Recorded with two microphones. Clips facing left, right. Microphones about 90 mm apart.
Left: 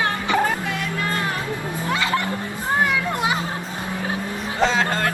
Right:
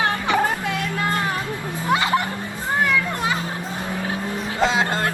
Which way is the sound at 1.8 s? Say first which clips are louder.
Right 3 dB; 20° right (ahead or behind).